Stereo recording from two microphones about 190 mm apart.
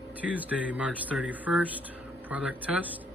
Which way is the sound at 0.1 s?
10° right (ahead or behind).